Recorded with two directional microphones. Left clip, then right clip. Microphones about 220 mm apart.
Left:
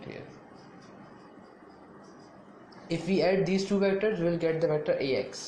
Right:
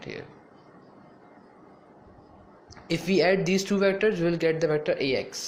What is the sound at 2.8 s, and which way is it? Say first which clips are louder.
A man's voice: right 4 dB; 40° right (ahead or behind).